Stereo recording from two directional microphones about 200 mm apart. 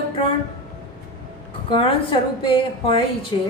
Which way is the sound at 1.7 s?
25° left (ahead or behind).